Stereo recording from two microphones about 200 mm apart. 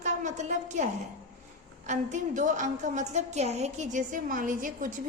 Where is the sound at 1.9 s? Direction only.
35° right (ahead or behind).